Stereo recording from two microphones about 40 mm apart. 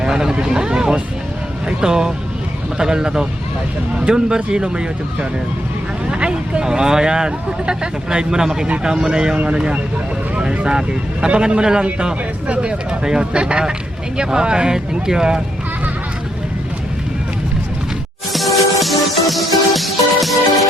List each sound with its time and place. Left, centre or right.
0.0 s vehicle: centre
1.6 s speech: centre
6.1 s speech: right
10.3 s vehicle: right
11.3 s speech: right
18.3 s music: centre